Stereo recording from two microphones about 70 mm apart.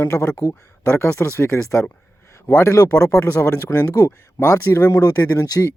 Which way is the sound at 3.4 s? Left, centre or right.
Left.